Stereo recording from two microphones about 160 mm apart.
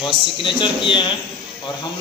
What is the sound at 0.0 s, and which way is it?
A man's voice, 30° left (ahead or behind).